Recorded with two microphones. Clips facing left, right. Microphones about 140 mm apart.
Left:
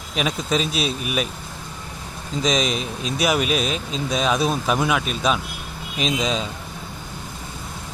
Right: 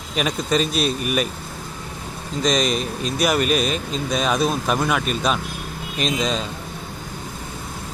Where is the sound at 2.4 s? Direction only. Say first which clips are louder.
Right 2 dB; centre (ahead or behind).